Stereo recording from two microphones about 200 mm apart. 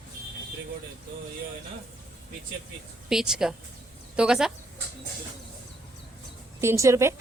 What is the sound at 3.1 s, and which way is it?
A woman's voice, centre (ahead or behind).